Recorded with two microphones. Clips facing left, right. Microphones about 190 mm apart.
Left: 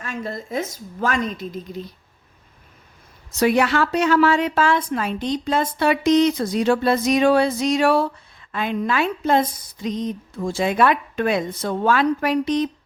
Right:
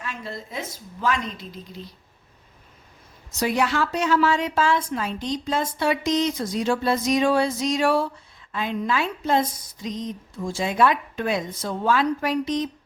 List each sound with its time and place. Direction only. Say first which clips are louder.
0.0 s a woman's voice: left 5 dB; 45° left (ahead or behind)
3.3 s a woman's voice: left 5 dB; 65° left (ahead or behind)